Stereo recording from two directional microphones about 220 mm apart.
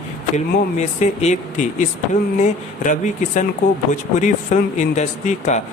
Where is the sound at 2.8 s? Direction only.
35° left (ahead or behind).